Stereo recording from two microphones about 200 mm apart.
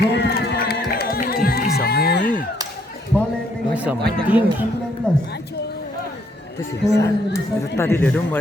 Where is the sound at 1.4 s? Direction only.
50° left (ahead or behind).